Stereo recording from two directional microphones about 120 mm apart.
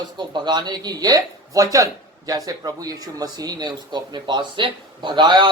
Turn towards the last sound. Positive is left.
turn(degrees=-40)  # may be behind; listen again after turning